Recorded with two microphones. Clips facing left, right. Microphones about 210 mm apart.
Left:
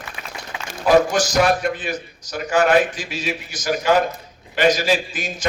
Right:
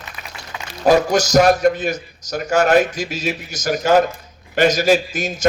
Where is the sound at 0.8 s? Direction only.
45° right (ahead or behind).